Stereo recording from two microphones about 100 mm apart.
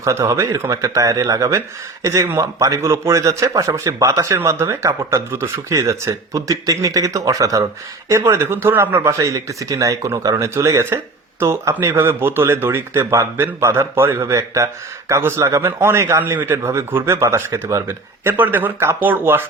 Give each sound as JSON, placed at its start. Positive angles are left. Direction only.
{"t": 0.0, "sound": "speech", "side_deg": -30}